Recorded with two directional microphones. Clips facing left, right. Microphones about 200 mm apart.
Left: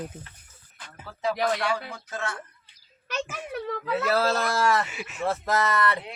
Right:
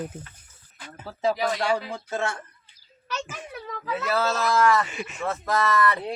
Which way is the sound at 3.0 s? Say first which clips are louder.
Left 2 dB; 60° left (ahead or behind).